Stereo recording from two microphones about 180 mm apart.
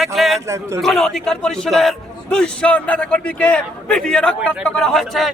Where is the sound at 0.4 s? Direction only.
15° right (ahead or behind).